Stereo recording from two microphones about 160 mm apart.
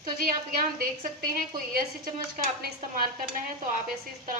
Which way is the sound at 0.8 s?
70° right (ahead or behind).